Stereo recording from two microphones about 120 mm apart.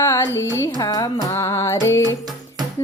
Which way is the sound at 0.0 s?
20° left (ahead or behind).